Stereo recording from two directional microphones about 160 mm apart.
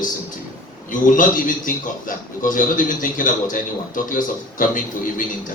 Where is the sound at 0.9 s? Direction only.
55° left (ahead or behind).